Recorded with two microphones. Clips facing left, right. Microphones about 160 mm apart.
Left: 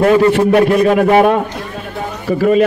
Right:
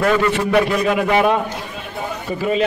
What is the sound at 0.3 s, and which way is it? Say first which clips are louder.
A man's voice: left 6 dB; 45° left (ahead or behind).